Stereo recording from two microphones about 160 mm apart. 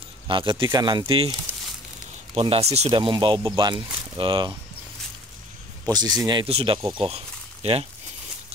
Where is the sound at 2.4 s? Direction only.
40° right (ahead or behind).